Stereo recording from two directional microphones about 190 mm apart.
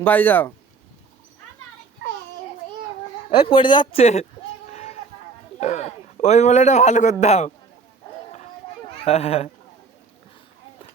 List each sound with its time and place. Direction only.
0.0 s a man's voice: 10° left (ahead or behind)
3.2 s speech: 30° left (ahead or behind)
4.0 s a man's voice: 35° left (ahead or behind)
4.7 s a sound: 35° left (ahead or behind)
5.5 s a man's voice: 35° left (ahead or behind)
9.0 s a man's voice: 35° left (ahead or behind)